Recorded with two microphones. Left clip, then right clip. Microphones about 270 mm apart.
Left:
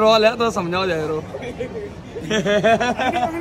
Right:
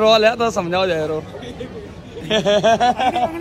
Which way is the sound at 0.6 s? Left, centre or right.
Left.